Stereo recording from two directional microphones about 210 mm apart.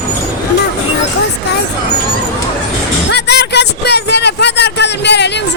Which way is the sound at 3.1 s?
55° left (ahead or behind).